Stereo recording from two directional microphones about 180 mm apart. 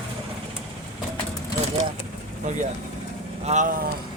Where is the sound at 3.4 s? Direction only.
40° right (ahead or behind).